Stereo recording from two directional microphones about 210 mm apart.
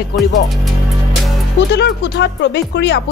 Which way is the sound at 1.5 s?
55° left (ahead or behind).